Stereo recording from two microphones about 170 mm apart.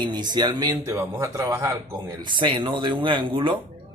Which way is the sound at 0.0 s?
25° right (ahead or behind).